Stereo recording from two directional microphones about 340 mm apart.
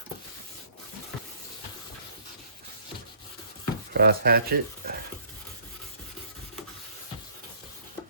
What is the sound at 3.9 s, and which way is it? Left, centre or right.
Speech, right.